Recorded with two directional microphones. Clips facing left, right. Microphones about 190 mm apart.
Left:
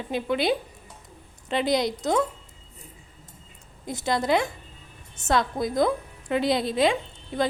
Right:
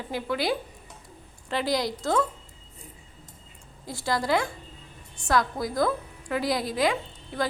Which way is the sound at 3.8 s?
20° left (ahead or behind).